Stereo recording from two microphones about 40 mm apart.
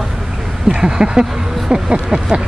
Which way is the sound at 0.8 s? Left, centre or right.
Centre.